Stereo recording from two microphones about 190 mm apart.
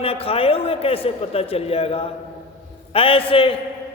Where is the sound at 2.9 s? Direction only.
30° left (ahead or behind).